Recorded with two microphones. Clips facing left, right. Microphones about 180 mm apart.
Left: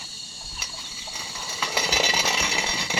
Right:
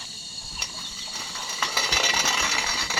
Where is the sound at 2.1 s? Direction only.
20° left (ahead or behind).